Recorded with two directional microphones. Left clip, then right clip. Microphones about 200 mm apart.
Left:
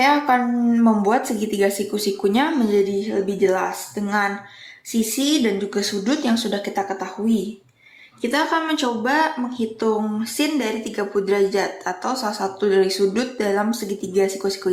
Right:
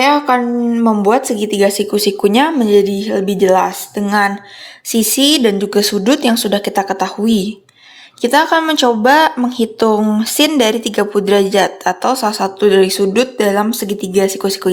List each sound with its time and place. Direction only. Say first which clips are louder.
0.0 s speech: right 5 dB; 20° right (ahead or behind); by 14.7 s 40° right (ahead or behind)